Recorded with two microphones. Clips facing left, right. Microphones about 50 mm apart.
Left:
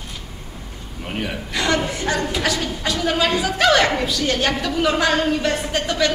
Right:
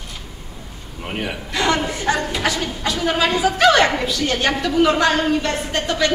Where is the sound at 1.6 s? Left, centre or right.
Centre.